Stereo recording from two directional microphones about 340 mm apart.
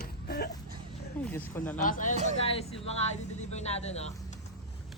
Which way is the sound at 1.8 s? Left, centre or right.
Left.